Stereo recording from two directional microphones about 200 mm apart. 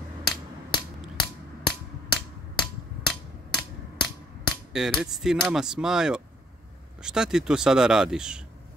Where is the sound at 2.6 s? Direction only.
5° left (ahead or behind).